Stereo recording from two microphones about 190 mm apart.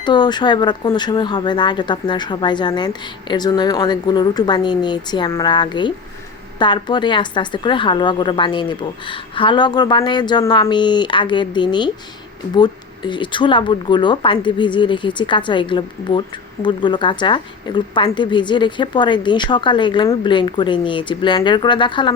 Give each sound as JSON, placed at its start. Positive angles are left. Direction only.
{"t": 0.0, "sound": "speech", "side_deg": 25}